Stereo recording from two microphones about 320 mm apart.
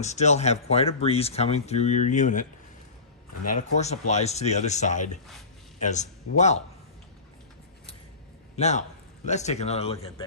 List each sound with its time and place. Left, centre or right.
0.0 s speech: left
3.5 s speech: left
8.5 s a man's voice: left